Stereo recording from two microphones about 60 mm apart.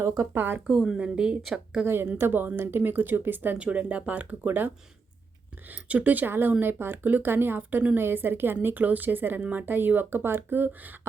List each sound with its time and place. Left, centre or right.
0.3 s speech: right
0.7 s a woman's voice: centre
1.8 s speech: right
3.6 s speech: right